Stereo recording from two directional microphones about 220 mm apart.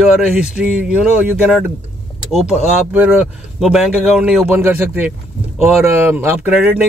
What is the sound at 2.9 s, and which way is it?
Speech, 5° right (ahead or behind).